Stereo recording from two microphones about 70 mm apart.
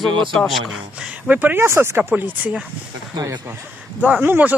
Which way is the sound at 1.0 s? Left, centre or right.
Centre.